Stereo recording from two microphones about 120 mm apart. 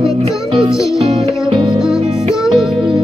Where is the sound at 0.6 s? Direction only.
5° right (ahead or behind).